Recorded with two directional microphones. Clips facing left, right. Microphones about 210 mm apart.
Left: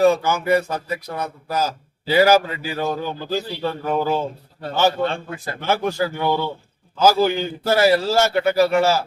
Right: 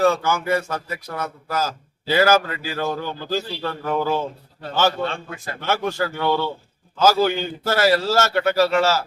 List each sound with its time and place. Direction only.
0.0 s a man's voice: 15° left (ahead or behind)
5.0 s a man's voice: 35° left (ahead or behind)
5.6 s a man's voice: 15° left (ahead or behind)